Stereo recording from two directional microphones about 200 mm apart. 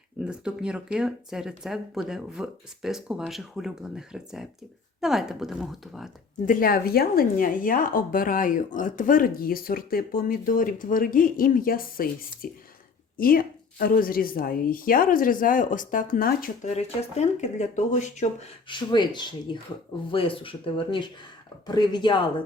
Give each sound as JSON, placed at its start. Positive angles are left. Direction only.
{"t": 0.3, "sound": "speech", "side_deg": -5}
{"t": 6.4, "sound": "speech", "side_deg": 45}
{"t": 18.7, "sound": "speech", "side_deg": 20}